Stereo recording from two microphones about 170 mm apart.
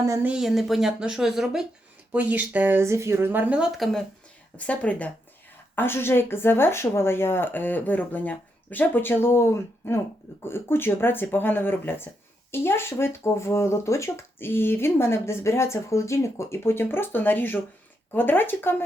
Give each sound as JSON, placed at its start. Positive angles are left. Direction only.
{"t": 0.0, "sound": "speech", "side_deg": -20}
{"t": 0.3, "sound": "speech", "side_deg": -5}